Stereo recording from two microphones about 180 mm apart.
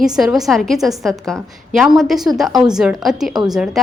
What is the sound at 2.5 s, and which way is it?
Speech, 20° right (ahead or behind).